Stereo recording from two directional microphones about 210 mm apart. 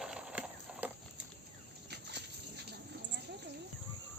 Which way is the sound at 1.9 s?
55° right (ahead or behind).